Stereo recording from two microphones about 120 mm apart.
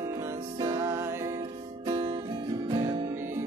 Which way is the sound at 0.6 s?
30° right (ahead or behind).